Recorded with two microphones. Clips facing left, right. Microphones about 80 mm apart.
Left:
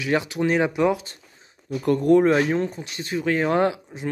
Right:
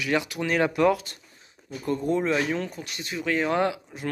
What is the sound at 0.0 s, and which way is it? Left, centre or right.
Speech, left.